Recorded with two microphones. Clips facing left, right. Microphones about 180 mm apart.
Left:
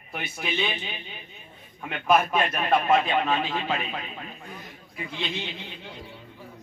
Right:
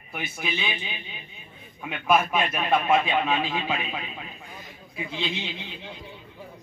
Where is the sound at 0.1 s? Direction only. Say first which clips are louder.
Even; 5° right (ahead or behind).